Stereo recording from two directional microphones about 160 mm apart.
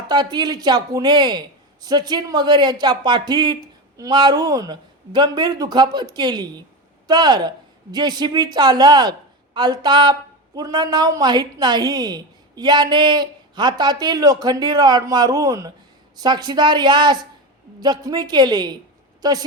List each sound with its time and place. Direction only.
0.1 s a woman's voice: 25° right (ahead or behind)